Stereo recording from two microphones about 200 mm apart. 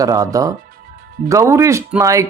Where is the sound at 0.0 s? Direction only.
15° right (ahead or behind).